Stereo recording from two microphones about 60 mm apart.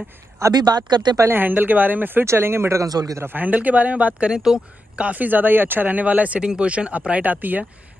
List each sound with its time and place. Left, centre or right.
0.4 s speech: right
1.2 s speech: right
2.2 s speech: right
2.8 s a man's voice: right
3.2 s speech: right
4.3 s speech: centre; by 7.6 s right